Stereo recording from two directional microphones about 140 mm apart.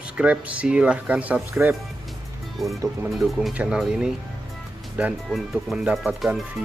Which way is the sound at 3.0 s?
5° right (ahead or behind).